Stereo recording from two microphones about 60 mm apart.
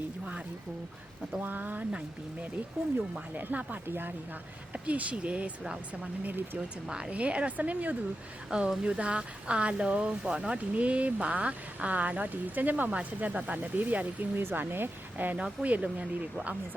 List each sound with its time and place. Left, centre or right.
1.4 s speech: right
3.3 s speech: right
4.7 s speech: right
6.2 s speech: right
6.8 s speech: centre
8.4 s speech: centre; by 15.4 s right
15.4 s speech: right